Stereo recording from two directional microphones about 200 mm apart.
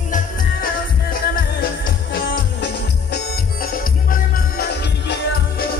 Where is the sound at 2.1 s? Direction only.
65° left (ahead or behind).